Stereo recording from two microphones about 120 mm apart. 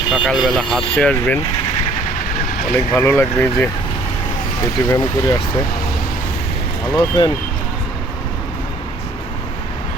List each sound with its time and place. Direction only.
0.1 s speech: centre (ahead or behind)
2.9 s speech: 20° left (ahead or behind)
4.9 s speech: 25° left (ahead or behind)
6.9 s speech: 35° left (ahead or behind)